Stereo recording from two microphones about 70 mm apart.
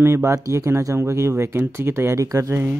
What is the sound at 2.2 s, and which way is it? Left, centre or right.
Speech, right.